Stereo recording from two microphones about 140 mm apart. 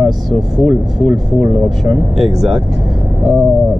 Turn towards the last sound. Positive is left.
turn(degrees=0)  # may be behind; listen again after turning